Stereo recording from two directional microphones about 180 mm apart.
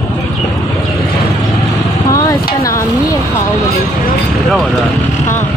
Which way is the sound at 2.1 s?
15° left (ahead or behind).